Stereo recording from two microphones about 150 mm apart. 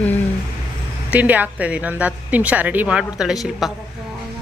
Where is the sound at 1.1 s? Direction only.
10° right (ahead or behind).